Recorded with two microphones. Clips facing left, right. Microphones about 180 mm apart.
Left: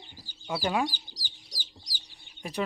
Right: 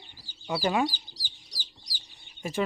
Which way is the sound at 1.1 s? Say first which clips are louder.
Left 2 dB; 15° left (ahead or behind).